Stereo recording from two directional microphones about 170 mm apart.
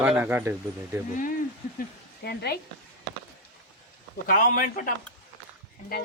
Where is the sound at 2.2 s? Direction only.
75° left (ahead or behind).